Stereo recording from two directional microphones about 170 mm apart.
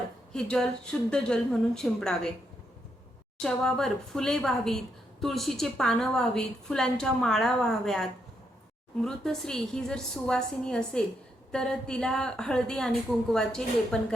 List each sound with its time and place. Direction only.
0.3 s a woman's voice: 5° left (ahead or behind)
3.4 s a woman's voice: 5° left (ahead or behind)